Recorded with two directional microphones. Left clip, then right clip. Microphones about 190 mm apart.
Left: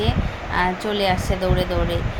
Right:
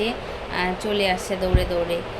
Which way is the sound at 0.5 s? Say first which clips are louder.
Left 3 dB; 5° left (ahead or behind).